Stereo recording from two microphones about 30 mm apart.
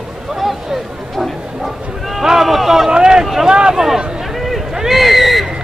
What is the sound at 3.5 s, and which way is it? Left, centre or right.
Speech, right.